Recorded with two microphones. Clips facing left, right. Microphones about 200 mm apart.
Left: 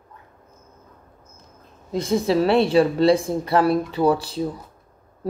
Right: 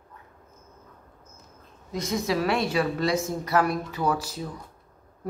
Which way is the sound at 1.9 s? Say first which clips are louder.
Left 7 dB; 30° left (ahead or behind).